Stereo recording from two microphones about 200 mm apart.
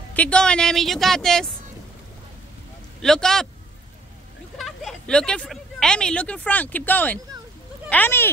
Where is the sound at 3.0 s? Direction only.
Centre (ahead or behind).